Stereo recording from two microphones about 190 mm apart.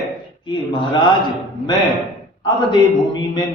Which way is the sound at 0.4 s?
25° left (ahead or behind).